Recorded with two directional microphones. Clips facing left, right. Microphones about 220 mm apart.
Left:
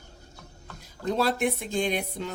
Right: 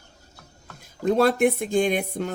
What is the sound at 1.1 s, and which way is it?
Speech, 50° right (ahead or behind).